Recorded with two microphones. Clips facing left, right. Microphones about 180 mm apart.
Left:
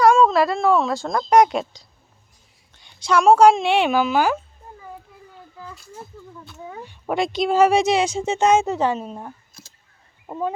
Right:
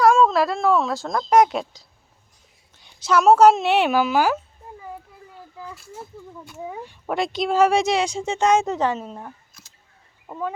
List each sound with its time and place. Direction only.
0.0 s a woman's voice: centre (ahead or behind)
5.5 s speech: 5° right (ahead or behind)
7.1 s a woman's voice: centre (ahead or behind)
10.2 s fowl: 25° left (ahead or behind)